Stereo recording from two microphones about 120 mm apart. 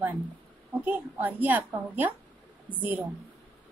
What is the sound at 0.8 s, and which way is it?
A woman's voice, 15° right (ahead or behind).